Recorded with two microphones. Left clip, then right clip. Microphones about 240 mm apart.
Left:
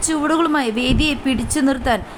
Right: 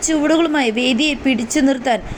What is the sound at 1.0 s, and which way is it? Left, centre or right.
Speech, left.